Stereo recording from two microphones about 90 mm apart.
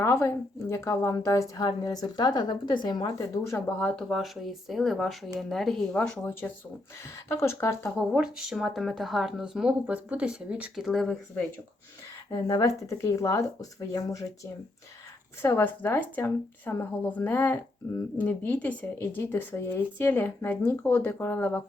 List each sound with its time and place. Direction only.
0.0 s a woman's voice: 30° left (ahead or behind); by 3.1 s 55° left (ahead or behind)
3.2 s speech: 35° left (ahead or behind)
3.8 s speech: 10° left (ahead or behind)
6.4 s speech: 20° left (ahead or behind)
8.1 s speech: 10° right (ahead or behind)
12.3 s speech: 40° left (ahead or behind)
15.4 s speech: 30° left (ahead or behind)